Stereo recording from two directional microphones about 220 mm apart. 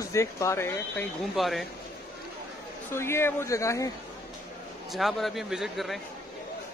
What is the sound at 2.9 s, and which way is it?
Speech, 10° left (ahead or behind).